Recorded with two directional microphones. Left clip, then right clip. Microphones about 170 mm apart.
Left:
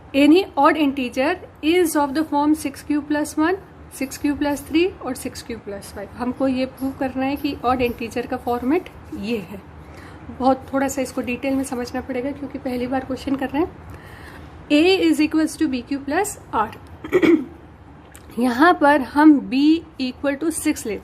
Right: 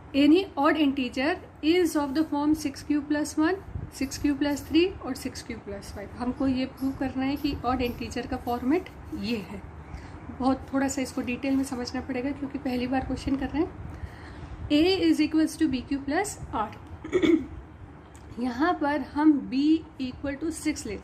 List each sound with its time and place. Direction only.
0.1 s a woman's voice: 30° left (ahead or behind)
14.7 s a woman's voice: 35° left (ahead or behind)
18.3 s a woman's voice: 45° left (ahead or behind)